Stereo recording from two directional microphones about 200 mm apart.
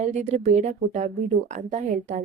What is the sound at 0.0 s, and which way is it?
Speech, 35° right (ahead or behind).